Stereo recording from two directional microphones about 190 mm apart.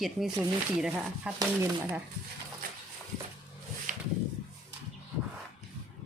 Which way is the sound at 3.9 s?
45° right (ahead or behind).